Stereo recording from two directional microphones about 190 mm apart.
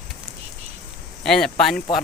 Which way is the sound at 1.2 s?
5° left (ahead or behind).